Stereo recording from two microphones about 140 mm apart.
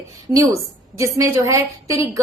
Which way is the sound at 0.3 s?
20° right (ahead or behind).